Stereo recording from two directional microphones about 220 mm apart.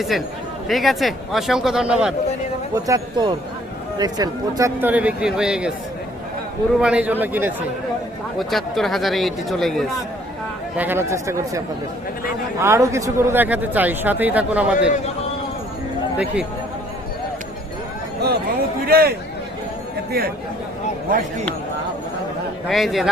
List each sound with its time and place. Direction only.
0.1 s speech: centre (ahead or behind)
2.7 s a man's voice: 15° right (ahead or behind)
6.7 s a man's voice: 5° right (ahead or behind)
10.8 s a man's voice: 10° right (ahead or behind)
16.1 s speech: 5° right (ahead or behind)
18.2 s chatter: 45° right (ahead or behind)
18.9 s speech: 45° right (ahead or behind)
22.6 s speech: centre (ahead or behind)